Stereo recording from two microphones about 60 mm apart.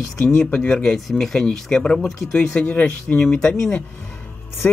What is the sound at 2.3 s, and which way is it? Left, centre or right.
Speech, left.